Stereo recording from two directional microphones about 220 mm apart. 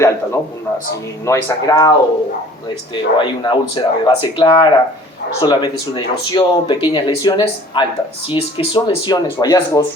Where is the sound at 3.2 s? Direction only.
20° left (ahead or behind).